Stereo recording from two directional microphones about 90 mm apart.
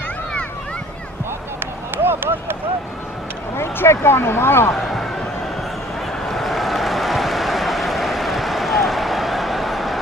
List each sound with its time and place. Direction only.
2.0 s a sound: 25° right (ahead or behind)
3.5 s speech: 30° left (ahead or behind)
4.7 s speech: centre (ahead or behind)
6.2 s vehicle: centre (ahead or behind)